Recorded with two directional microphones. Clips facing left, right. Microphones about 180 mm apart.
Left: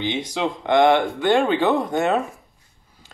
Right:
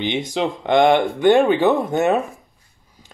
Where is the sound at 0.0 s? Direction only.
20° right (ahead or behind).